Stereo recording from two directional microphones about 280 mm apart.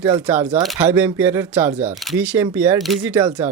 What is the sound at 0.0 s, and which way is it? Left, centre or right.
Speech, centre.